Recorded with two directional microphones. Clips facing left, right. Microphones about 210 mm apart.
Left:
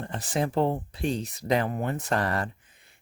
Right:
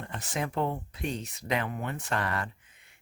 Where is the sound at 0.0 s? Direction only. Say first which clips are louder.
Left 5 dB; 35° left (ahead or behind).